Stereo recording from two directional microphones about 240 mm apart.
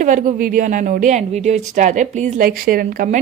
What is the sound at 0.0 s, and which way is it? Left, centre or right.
A woman's voice, right.